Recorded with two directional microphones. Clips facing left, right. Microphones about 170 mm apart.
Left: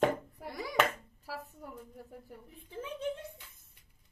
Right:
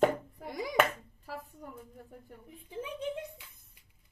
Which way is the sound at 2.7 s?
15° right (ahead or behind).